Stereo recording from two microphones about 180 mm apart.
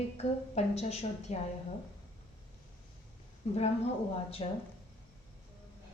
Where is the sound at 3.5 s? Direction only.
35° left (ahead or behind).